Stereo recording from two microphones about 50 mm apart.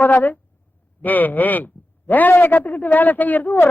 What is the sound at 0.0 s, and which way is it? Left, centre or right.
A man's voice, left.